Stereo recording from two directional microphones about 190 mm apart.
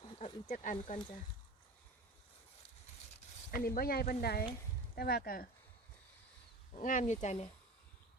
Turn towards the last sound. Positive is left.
turn(degrees=40)  # may be behind; listen again after turning